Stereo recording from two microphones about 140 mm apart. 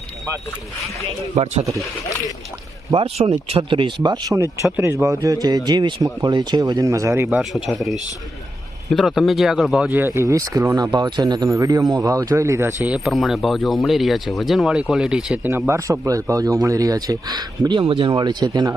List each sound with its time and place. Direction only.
2.9 s speech: 45° right (ahead or behind); by 7.3 s 20° right (ahead or behind)
7.3 s speech: 5° right (ahead or behind)
9.9 s speech: 15° right (ahead or behind)
13.1 s speech: centre (ahead or behind)
15.4 s speech: 15° right (ahead or behind)